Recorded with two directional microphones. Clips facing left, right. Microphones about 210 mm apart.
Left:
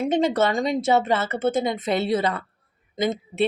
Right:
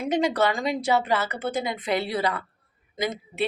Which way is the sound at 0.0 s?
25° left (ahead or behind).